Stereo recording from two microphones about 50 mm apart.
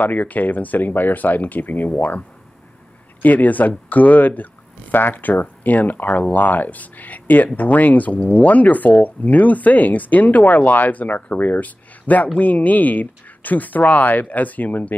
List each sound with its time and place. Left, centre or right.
0.0 s speech: left